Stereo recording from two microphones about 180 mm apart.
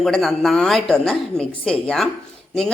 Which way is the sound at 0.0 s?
Centre (ahead or behind).